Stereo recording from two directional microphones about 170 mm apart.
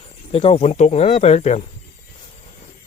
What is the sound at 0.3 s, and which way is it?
Speech, 35° left (ahead or behind).